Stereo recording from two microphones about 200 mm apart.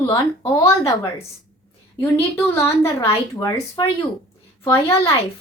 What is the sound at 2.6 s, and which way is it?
Speech, 15° left (ahead or behind).